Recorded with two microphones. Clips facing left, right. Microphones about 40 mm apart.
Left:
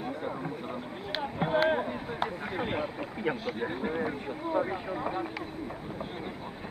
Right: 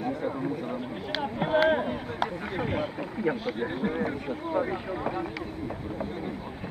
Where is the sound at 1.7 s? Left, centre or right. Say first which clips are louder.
Right 3 dB; right.